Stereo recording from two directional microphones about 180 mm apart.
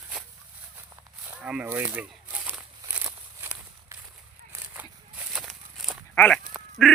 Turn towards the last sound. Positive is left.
turn(degrees=0)  # may be behind; listen again after turning